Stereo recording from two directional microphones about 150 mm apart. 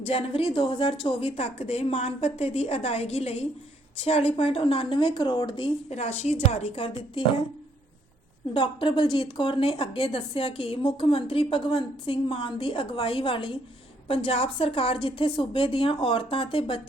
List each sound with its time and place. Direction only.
0.0 s a woman's voice: 35° left (ahead or behind)
8.5 s a woman's voice: 35° left (ahead or behind)